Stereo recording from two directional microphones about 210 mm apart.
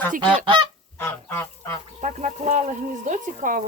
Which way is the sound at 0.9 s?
10° left (ahead or behind).